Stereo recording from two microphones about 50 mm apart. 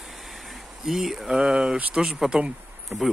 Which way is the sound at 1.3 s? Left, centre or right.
Centre.